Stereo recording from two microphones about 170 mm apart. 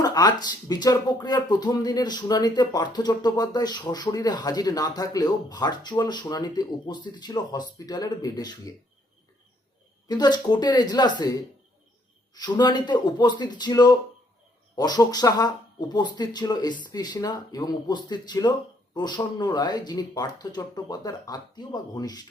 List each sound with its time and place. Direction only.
0.0 s speech: 25° left (ahead or behind)
10.1 s speech: 25° left (ahead or behind)